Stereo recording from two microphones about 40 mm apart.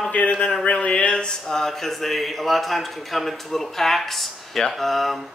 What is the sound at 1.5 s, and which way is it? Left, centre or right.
Speech, centre.